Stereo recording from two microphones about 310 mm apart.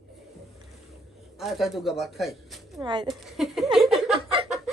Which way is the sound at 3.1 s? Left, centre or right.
Centre.